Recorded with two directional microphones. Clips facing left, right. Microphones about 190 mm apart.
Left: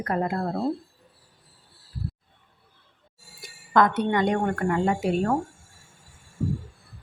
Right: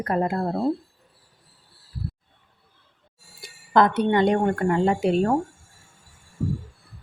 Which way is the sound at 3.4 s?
30° right (ahead or behind).